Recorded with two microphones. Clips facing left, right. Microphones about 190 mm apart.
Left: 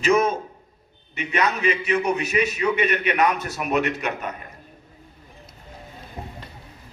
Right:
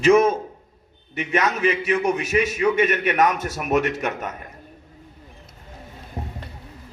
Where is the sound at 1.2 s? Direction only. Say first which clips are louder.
Right 2 dB; 50° right (ahead or behind).